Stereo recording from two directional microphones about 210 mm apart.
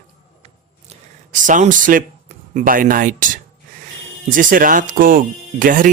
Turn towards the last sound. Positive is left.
turn(degrees=-40)  # may be behind; listen again after turning